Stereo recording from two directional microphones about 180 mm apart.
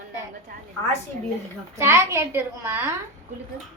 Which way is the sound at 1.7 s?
15° right (ahead or behind).